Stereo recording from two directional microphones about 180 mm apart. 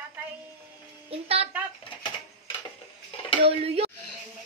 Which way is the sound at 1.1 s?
35° right (ahead or behind).